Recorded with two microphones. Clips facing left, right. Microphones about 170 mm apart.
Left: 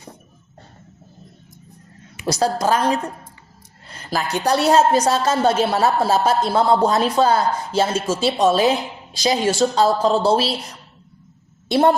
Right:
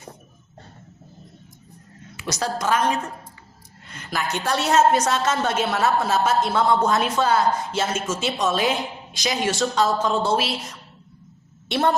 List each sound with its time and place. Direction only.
2.2 s a woman's voice: 35° left (ahead or behind)